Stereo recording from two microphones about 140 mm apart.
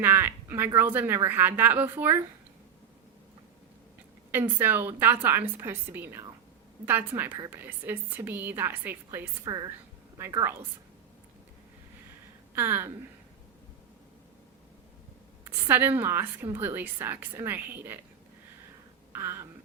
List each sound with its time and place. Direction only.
0.0 s a woman's voice: 15° right (ahead or behind)
4.3 s a woman's voice: 15° right (ahead or behind)
9.4 s a sound: 30° right (ahead or behind)
10.2 s a woman's voice: 20° right (ahead or behind)
12.5 s a woman's voice: 15° right (ahead or behind)
15.4 s a woman's voice: 15° right (ahead or behind)
19.1 s a sound: 20° right (ahead or behind)